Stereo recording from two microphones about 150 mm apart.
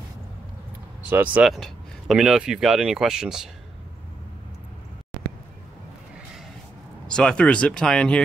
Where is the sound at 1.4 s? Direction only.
Centre (ahead or behind).